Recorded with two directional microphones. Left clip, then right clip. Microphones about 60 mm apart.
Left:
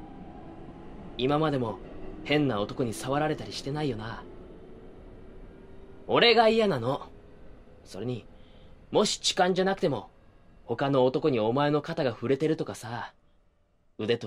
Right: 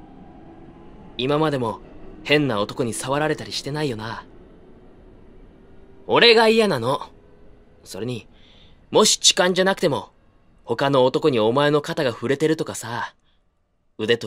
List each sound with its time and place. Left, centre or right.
1.1 s speech: centre
2.6 s speech: right
2.9 s speech: right
6.0 s speech: right
6.8 s speech: right
11.8 s a man's voice: centre